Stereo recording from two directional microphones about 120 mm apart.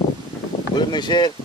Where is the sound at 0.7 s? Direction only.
35° left (ahead or behind).